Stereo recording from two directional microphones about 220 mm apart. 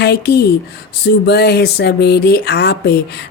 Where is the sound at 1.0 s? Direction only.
50° left (ahead or behind).